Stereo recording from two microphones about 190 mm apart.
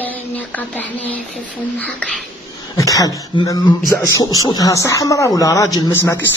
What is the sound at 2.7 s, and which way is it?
Speech, 15° left (ahead or behind).